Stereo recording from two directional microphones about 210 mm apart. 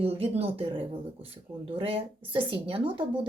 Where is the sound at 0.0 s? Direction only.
30° right (ahead or behind).